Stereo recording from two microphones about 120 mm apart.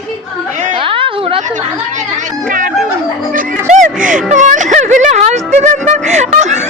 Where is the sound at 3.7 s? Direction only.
90° right; by 6.6 s 75° right (ahead or behind).